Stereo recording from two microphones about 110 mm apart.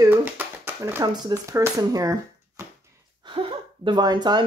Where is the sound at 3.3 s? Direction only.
50° right (ahead or behind).